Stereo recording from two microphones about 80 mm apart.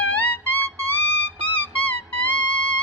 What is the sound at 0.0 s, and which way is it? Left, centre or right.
Music, left.